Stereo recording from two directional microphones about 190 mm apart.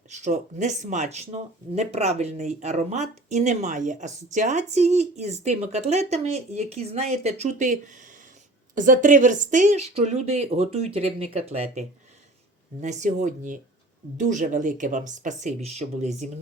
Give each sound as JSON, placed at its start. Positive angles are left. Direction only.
{"t": 0.1, "sound": "speech", "side_deg": -40}